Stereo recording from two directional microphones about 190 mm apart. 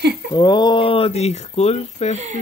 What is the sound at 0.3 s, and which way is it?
Speech, 20° left (ahead or behind).